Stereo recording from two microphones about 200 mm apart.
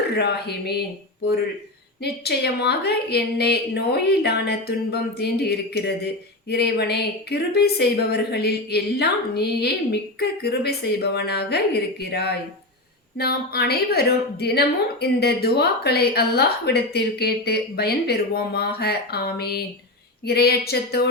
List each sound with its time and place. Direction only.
0.2 s a woman's voice: 55° left (ahead or behind)
2.0 s a woman's voice: 55° left (ahead or behind)